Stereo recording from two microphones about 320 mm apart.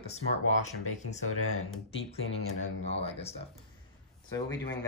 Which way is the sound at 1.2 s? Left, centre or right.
Left.